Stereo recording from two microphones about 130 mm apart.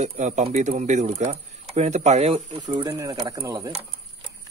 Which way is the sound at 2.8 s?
25° right (ahead or behind).